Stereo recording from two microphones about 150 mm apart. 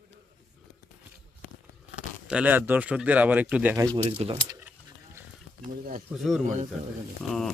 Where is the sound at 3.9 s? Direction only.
40° right (ahead or behind).